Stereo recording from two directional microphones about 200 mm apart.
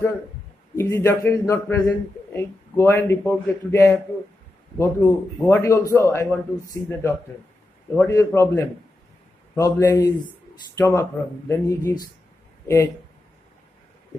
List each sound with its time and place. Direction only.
0.7 s a man's voice: 15° left (ahead or behind)